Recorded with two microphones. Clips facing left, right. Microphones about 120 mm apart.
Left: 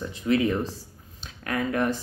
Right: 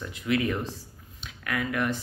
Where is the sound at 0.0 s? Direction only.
30° left (ahead or behind).